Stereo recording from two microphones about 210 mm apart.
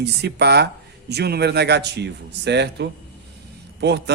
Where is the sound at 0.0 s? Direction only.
50° right (ahead or behind).